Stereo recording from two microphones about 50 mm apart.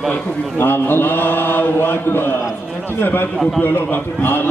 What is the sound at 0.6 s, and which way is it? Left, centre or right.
A man's voice, left.